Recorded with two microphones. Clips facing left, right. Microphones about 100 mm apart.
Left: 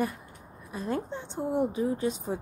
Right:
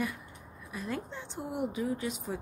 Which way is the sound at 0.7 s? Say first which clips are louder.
Left 5 dB; 35° left (ahead or behind).